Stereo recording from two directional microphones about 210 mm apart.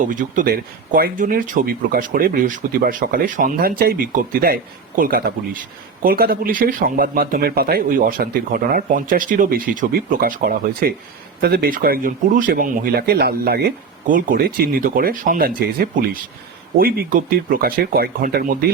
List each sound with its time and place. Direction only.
0.0 s speech: 40° right (ahead or behind)